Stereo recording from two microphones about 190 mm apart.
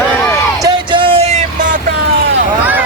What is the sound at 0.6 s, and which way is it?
Music, 25° right (ahead or behind).